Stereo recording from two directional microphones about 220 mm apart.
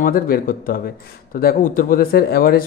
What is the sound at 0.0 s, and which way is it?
Speech, 40° left (ahead or behind).